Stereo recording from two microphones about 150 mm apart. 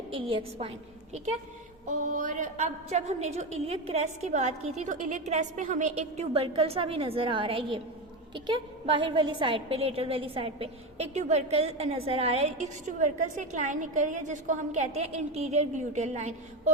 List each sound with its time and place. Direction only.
0.1 s a woman's voice: 35° right (ahead or behind)
2.0 s a woman's voice: 55° right (ahead or behind)